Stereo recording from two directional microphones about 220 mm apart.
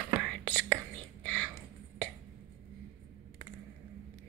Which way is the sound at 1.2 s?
5° left (ahead or behind).